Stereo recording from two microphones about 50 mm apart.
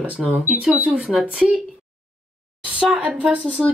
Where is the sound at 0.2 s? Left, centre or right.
Centre.